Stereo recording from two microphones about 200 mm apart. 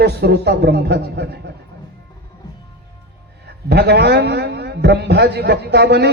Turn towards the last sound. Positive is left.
turn(degrees=-55)  # may be behind; listen again after turning